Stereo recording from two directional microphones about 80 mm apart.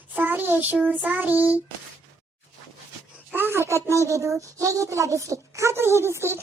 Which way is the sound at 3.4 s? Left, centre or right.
Right.